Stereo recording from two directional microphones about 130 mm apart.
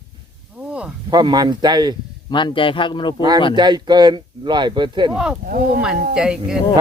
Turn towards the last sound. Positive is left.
turn(degrees=-5)  # may be behind; listen again after turning